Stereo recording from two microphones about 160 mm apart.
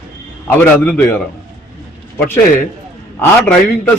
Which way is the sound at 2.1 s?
10° left (ahead or behind).